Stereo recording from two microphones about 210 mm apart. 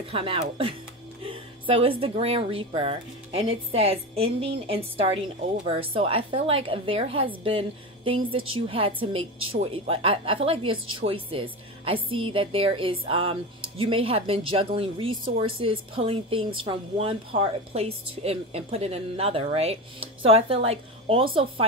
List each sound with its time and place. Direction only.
0.0 s a woman's voice: 25° right (ahead or behind)